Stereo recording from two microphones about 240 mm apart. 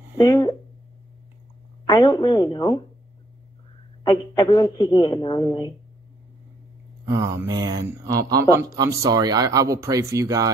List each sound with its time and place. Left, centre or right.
0.2 s a man's voice: centre
1.9 s a man's voice: centre
4.0 s a man's voice: centre
7.1 s speech: centre